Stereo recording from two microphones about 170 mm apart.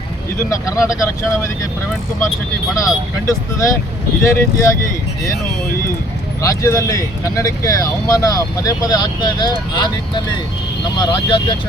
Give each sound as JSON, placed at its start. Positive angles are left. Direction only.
{"t": 0.5, "sound": "speech", "side_deg": 20}
{"t": 2.8, "sound": "speech", "side_deg": 20}
{"t": 6.4, "sound": "speech", "side_deg": 20}